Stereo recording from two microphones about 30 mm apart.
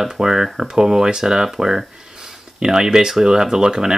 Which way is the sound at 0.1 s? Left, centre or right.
Right.